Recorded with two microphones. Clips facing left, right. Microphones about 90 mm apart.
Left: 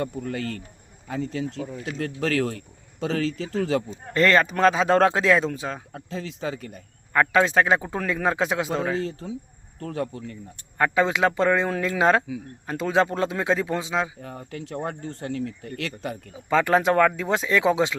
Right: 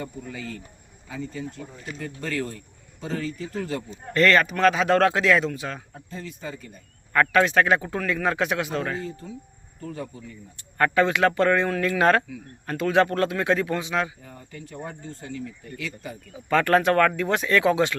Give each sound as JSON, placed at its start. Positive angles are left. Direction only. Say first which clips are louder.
{"t": 0.0, "sound": "speech", "louder": "left 6 dB", "side_deg": 70}
{"t": 4.1, "sound": "a man's voice", "louder": "even", "side_deg": 25}
{"t": 5.9, "sound": "speech", "louder": "left 4 dB", "side_deg": 90}
{"t": 7.1, "sound": "a man's voice", "louder": "even", "side_deg": 20}
{"t": 9.0, "sound": "speech", "louder": "left 3 dB", "side_deg": 90}
{"t": 9.8, "sound": "speech", "louder": "left 5 dB", "side_deg": 75}
{"t": 10.8, "sound": "a man's voice", "louder": "right 1 dB", "side_deg": 15}
{"t": 14.2, "sound": "speech", "louder": "left 6 dB", "side_deg": 75}
{"t": 16.3, "sound": "speech", "louder": "even", "side_deg": 15}